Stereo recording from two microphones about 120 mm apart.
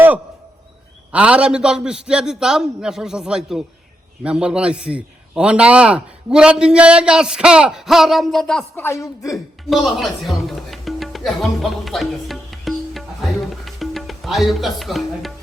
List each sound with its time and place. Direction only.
1.1 s a man's voice: 10° right (ahead or behind)
8.7 s speech: 20° left (ahead or behind)
9.3 s music: centre (ahead or behind)